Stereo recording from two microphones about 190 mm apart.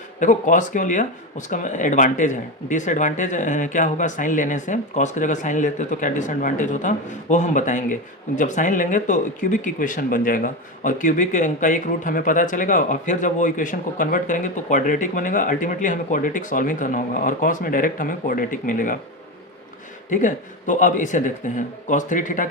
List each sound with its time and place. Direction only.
0.2 s speech: 40° left (ahead or behind)
20.1 s speech: 40° left (ahead or behind)